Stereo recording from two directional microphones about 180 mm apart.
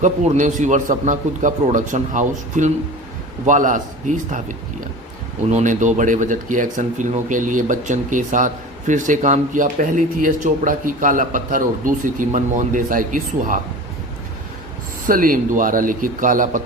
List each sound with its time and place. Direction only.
0.0 s speech: 45° right (ahead or behind)
15.0 s speech: 50° right (ahead or behind)